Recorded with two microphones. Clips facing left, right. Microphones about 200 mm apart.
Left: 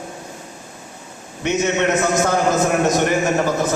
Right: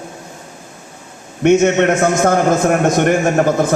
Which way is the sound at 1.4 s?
55° right (ahead or behind).